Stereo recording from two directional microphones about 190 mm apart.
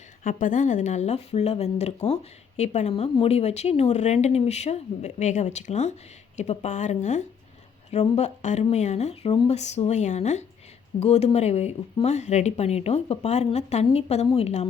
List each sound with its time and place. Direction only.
0.3 s speech: 45° left (ahead or behind)